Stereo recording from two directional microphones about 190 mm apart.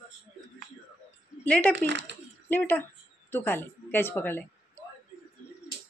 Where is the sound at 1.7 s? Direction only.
70° right (ahead or behind).